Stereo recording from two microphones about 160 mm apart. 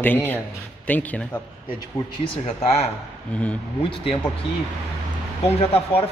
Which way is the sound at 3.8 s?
35° left (ahead or behind).